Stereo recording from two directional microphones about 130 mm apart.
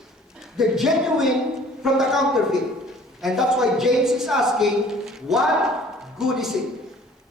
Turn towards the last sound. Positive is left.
turn(degrees=-5)  # may be behind; listen again after turning